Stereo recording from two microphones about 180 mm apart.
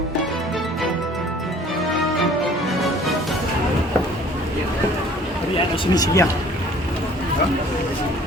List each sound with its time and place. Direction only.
5.8 s speech: 20° left (ahead or behind)